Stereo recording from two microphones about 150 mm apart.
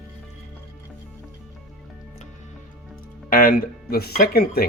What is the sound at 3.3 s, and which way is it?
Speech, 70° left (ahead or behind).